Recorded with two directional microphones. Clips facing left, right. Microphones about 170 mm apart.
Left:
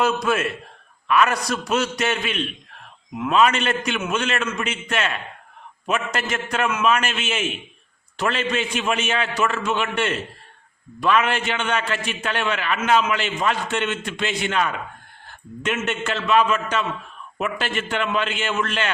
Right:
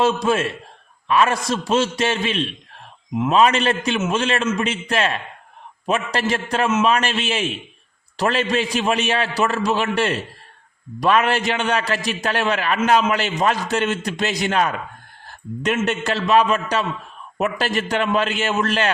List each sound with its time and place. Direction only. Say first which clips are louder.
0.0 s a man's voice: right 2 dB; 30° right (ahead or behind)